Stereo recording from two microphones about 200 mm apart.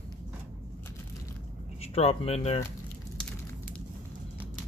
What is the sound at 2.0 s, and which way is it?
Speech, 30° left (ahead or behind).